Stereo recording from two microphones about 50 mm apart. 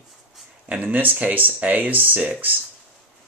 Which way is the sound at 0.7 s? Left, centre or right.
Right.